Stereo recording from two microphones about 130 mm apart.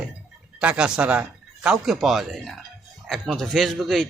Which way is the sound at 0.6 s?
10° right (ahead or behind).